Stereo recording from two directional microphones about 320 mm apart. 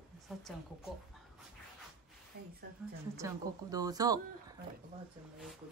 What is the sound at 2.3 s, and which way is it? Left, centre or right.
Speech, right.